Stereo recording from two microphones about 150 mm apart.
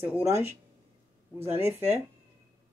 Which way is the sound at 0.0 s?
15° right (ahead or behind).